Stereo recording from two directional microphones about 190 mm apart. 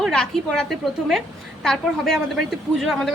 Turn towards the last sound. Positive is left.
turn(degrees=0)  # may be behind; listen again after turning